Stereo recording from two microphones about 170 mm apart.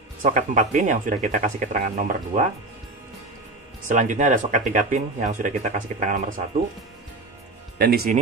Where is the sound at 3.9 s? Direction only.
45° right (ahead or behind).